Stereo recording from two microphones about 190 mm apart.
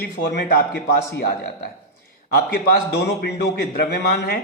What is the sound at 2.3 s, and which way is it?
A man's voice, 50° left (ahead or behind).